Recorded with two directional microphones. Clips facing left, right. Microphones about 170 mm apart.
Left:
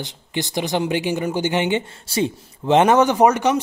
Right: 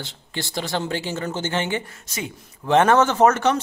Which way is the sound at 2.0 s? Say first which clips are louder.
Left 10 dB; 30° left (ahead or behind).